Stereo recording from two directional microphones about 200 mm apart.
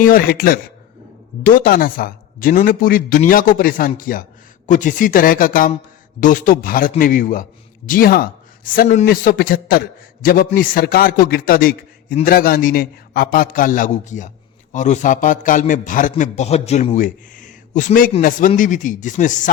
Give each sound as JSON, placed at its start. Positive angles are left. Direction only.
{"t": 0.0, "sound": "a man's voice", "side_deg": 45}